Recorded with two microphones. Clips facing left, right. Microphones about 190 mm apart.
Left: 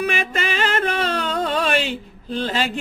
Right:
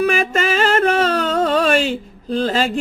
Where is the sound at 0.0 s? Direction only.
45° right (ahead or behind).